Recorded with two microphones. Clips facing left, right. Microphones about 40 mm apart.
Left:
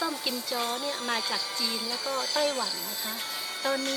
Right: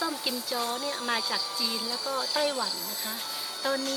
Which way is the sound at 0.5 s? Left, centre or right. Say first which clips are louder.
Even; centre.